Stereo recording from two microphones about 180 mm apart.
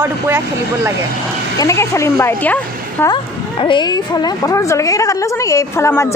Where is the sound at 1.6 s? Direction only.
15° left (ahead or behind).